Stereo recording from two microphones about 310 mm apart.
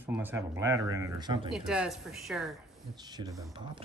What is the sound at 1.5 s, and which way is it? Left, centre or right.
Speech, centre.